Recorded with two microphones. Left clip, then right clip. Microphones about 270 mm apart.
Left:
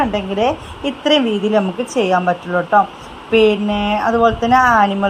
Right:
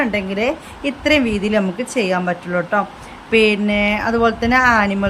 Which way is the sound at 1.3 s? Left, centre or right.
Centre.